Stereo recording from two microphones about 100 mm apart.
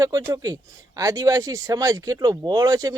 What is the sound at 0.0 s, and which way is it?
Speech, 35° right (ahead or behind).